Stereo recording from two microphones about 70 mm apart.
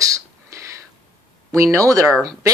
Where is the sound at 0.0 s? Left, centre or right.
Right.